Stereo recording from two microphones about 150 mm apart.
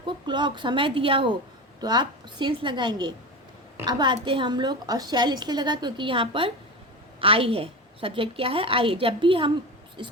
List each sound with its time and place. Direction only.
0.0 s a woman's voice: 30° right (ahead or behind)